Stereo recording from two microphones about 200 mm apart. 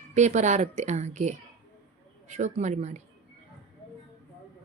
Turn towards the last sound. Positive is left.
turn(degrees=-35)  # may be behind; listen again after turning